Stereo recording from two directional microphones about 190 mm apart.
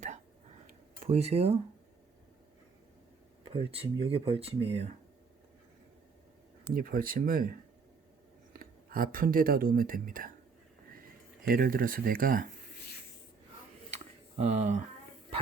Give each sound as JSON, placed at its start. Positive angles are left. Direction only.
{"t": 0.7, "sound": "a sound", "side_deg": -35}
{"t": 3.5, "sound": "speech", "side_deg": -30}
{"t": 6.7, "sound": "speech", "side_deg": -50}
{"t": 8.5, "sound": "speech", "side_deg": -50}
{"t": 11.4, "sound": "speech", "side_deg": -50}
{"t": 14.0, "sound": "a sound", "side_deg": -35}